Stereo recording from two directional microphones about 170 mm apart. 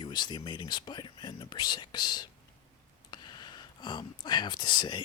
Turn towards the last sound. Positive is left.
turn(degrees=25)  # may be behind; listen again after turning